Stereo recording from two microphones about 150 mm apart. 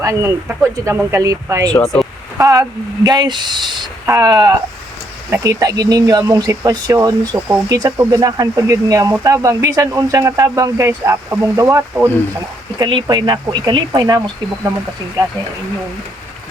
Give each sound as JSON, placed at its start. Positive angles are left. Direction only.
{"t": 0.0, "sound": "speech", "side_deg": -20}
{"t": 1.7, "sound": "speech", "side_deg": 5}
{"t": 2.4, "sound": "speech", "side_deg": -20}
{"t": 12.8, "sound": "speech", "side_deg": -30}
{"t": 15.2, "sound": "speech", "side_deg": -30}